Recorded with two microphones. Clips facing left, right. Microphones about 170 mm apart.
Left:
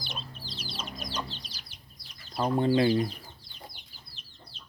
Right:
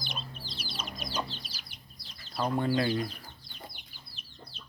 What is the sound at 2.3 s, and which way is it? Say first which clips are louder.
Speech: left 4 dB; 20° left (ahead or behind).